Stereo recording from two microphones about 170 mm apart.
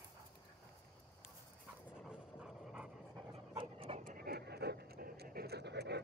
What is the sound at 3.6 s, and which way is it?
Dog, 35° right (ahead or behind).